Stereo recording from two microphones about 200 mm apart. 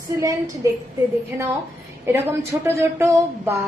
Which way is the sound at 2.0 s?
10° right (ahead or behind).